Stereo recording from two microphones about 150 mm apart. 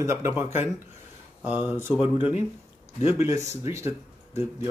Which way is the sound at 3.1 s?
20° right (ahead or behind).